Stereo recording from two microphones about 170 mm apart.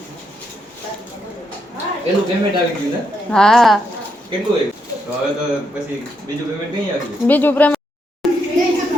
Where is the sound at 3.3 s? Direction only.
5° left (ahead or behind).